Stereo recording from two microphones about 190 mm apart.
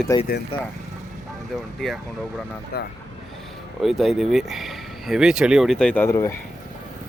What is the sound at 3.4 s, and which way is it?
Speech, centre (ahead or behind).